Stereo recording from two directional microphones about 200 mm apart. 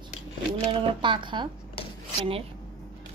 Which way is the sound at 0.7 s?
25° right (ahead or behind).